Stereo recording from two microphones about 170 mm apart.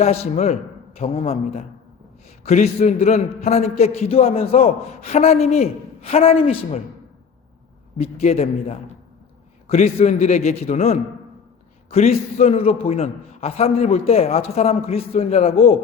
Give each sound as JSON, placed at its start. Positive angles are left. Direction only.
{"t": 0.0, "sound": "a man's voice", "side_deg": 40}
{"t": 7.9, "sound": "a man's voice", "side_deg": 40}